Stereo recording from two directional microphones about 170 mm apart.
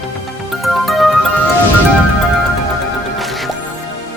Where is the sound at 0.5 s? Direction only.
Centre (ahead or behind).